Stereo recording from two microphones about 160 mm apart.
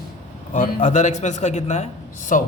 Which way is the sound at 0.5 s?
50° left (ahead or behind).